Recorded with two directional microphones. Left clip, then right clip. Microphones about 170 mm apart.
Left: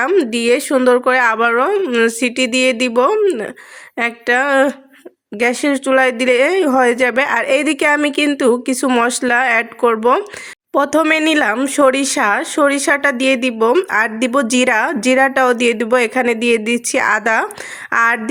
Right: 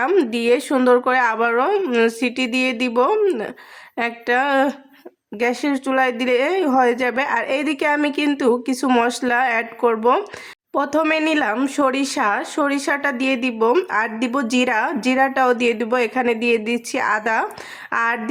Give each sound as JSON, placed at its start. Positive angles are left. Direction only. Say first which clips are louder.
{"t": 0.1, "sound": "speech", "louder": "left 3 dB", "side_deg": 10}